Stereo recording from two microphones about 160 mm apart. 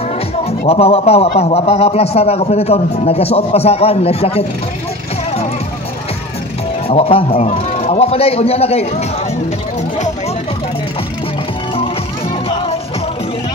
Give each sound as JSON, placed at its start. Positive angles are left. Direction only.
{"t": 0.5, "sound": "a man's voice", "side_deg": 40}
{"t": 6.9, "sound": "a man's voice", "side_deg": 40}